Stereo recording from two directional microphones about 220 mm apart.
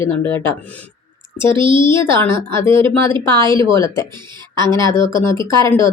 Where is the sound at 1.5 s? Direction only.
20° right (ahead or behind).